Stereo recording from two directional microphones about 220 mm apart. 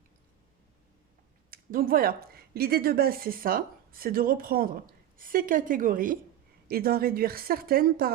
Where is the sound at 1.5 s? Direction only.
40° right (ahead or behind).